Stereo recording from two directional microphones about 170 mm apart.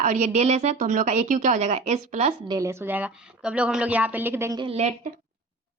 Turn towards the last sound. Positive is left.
turn(degrees=-40)  # may be behind; listen again after turning